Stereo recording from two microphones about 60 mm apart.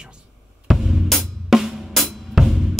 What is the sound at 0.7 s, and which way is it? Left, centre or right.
Drum kit, centre.